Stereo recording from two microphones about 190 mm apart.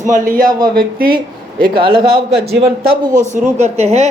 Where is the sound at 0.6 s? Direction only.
50° right (ahead or behind).